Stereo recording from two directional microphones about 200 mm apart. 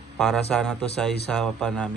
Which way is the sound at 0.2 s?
Centre (ahead or behind).